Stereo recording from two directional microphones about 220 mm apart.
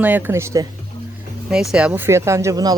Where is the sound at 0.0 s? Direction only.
10° right (ahead or behind).